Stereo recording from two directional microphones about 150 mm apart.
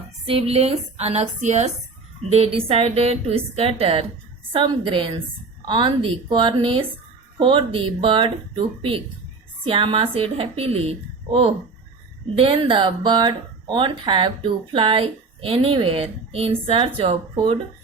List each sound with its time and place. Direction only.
0.3 s a woman's voice: 40° right (ahead or behind)